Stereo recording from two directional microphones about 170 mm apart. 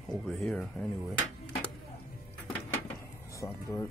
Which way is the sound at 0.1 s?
Centre (ahead or behind).